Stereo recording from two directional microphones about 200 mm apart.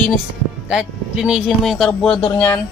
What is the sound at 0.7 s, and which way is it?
Speech, 5° right (ahead or behind).